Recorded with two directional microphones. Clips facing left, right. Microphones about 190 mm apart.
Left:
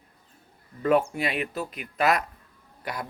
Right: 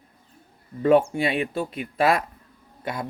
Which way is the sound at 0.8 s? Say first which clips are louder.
Right 4 dB; 30° right (ahead or behind).